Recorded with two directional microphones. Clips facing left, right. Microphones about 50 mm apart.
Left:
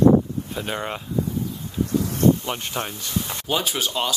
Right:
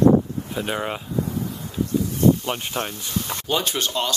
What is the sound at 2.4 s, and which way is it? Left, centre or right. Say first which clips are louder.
Speech: right 1 dB; centre.